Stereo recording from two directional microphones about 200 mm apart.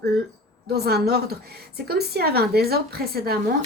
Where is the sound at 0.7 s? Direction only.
50° right (ahead or behind).